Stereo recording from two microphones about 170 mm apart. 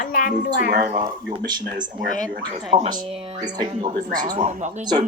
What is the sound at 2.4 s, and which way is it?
Speech, 25° right (ahead or behind).